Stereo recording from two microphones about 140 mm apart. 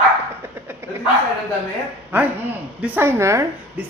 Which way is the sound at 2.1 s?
15° right (ahead or behind).